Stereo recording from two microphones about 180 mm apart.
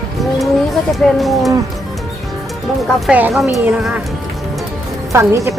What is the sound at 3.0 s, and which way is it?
A woman's voice, 5° right (ahead or behind).